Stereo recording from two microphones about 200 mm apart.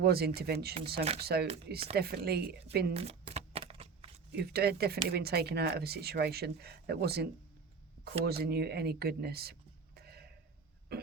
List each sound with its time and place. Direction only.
0.0 s speech: 50° right (ahead or behind)
2.9 s a sound: 30° right (ahead or behind)
4.3 s speech: 55° right (ahead or behind)
10.9 s cough: 55° right (ahead or behind)